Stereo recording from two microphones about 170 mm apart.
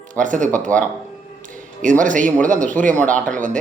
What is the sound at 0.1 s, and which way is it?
Speech, 50° right (ahead or behind).